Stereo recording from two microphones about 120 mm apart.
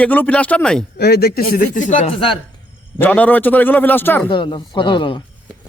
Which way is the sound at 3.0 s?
15° left (ahead or behind).